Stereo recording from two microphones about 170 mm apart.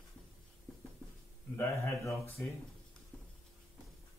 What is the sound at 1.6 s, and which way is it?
Speech, 15° left (ahead or behind).